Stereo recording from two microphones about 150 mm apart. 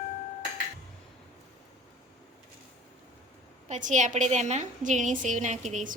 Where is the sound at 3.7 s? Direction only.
55° right (ahead or behind).